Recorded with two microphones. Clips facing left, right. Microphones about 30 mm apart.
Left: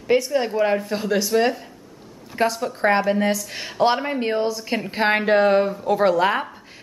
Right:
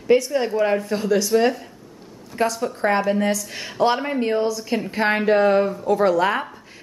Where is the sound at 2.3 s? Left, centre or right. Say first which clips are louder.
Even; centre.